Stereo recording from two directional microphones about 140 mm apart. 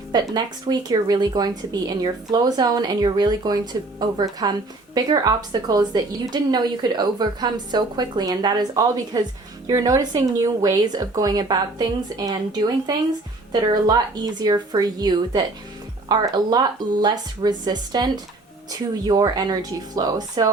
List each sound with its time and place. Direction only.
0.1 s a woman's voice: 30° right (ahead or behind)